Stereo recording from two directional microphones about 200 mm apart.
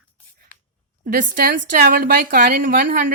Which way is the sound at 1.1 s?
45° right (ahead or behind).